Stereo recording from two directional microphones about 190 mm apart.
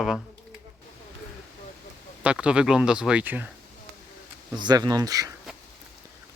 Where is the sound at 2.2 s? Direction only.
5° right (ahead or behind).